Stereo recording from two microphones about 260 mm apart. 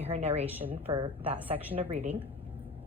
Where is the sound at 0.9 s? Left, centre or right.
Centre.